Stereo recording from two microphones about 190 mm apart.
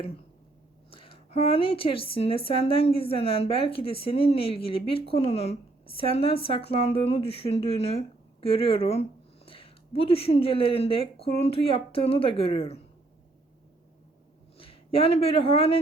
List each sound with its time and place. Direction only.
0.9 s a woman's voice: 30° left (ahead or behind)
14.6 s speech: 30° left (ahead or behind)